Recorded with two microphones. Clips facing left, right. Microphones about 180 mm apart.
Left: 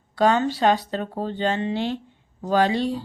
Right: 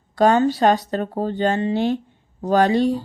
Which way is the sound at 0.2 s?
45° right (ahead or behind).